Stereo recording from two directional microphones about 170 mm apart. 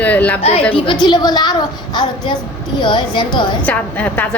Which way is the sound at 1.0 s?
25° left (ahead or behind).